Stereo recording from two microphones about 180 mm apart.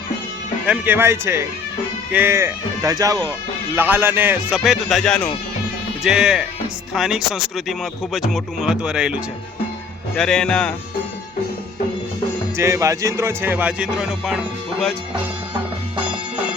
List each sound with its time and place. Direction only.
0.7 s speech: 10° right (ahead or behind); by 10.8 s 5° left (ahead or behind)
12.5 s speech: 15° right (ahead or behind)